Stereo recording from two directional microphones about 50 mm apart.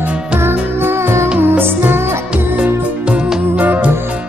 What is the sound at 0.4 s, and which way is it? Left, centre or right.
Music, right.